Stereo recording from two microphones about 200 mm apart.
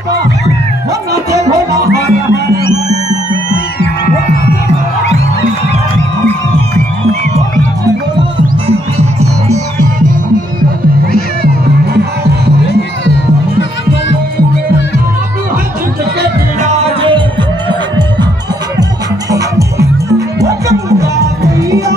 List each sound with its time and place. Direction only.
7.8 s music: 25° right (ahead or behind)
16.6 s music: 30° right (ahead or behind)
19.3 s music: 15° right (ahead or behind)